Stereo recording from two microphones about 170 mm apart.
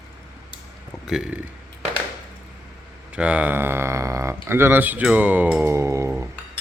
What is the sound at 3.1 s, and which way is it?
Speech, 5° right (ahead or behind).